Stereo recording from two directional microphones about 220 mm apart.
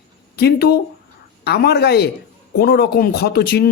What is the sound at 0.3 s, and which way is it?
Speech, 45° left (ahead or behind).